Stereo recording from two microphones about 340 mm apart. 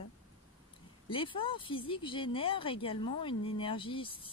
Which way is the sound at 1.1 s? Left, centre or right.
Centre.